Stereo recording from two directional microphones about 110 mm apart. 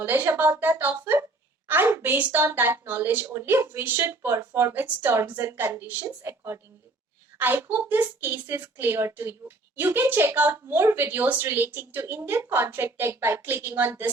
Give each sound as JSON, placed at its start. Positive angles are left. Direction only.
{"t": 0.0, "sound": "a woman's voice", "side_deg": -20}